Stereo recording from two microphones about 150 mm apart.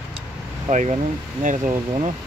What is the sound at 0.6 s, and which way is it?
Speech, 50° right (ahead or behind).